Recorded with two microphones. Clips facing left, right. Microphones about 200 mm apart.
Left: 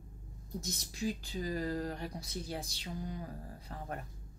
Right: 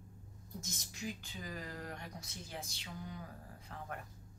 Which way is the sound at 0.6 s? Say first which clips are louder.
Left 7 dB; 35° left (ahead or behind).